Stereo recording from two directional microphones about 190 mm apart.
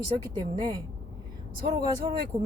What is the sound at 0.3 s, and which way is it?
Speech, 25° right (ahead or behind).